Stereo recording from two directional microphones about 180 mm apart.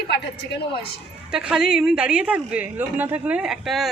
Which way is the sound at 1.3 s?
5° right (ahead or behind).